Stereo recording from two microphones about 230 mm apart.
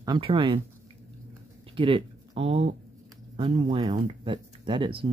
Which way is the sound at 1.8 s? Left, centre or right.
Right.